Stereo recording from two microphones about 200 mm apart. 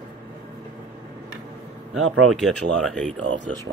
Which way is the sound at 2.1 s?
90° right.